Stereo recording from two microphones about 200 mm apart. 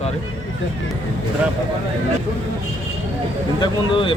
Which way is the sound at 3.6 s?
25° left (ahead or behind).